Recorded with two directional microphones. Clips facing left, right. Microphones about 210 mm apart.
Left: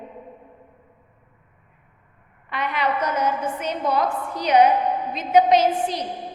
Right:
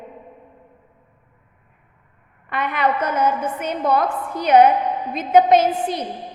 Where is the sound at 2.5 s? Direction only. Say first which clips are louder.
Right 3 dB; 55° right (ahead or behind).